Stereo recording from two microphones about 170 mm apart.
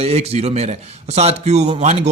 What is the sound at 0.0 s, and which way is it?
Speech, 40° right (ahead or behind).